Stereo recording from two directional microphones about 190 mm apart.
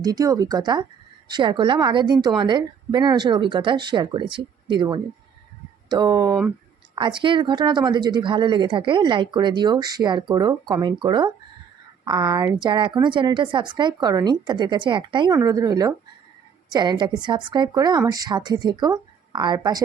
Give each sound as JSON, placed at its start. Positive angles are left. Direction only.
{"t": 0.0, "sound": "speech", "side_deg": -20}